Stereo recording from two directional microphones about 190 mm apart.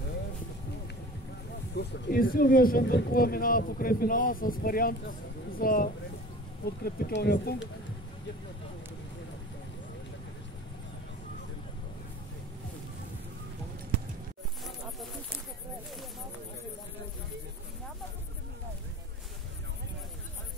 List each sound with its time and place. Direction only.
1.8 s speech: 50° left (ahead or behind)